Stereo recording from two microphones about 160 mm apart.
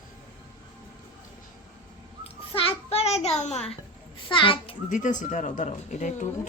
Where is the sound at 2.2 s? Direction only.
35° left (ahead or behind).